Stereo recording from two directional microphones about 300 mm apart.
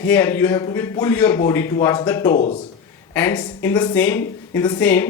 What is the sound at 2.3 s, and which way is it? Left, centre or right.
Speech, left.